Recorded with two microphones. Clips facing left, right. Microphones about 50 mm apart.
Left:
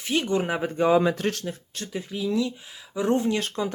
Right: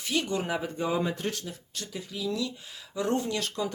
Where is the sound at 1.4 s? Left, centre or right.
Left.